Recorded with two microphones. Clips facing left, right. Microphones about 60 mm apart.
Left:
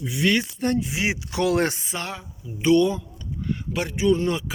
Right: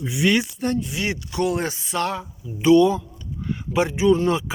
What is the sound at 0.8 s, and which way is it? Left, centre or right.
Speech, centre.